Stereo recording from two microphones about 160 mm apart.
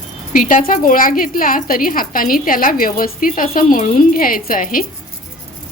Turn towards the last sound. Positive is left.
turn(degrees=60)  # may be behind; listen again after turning